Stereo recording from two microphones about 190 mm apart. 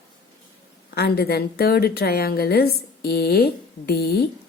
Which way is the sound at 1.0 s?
55° left (ahead or behind).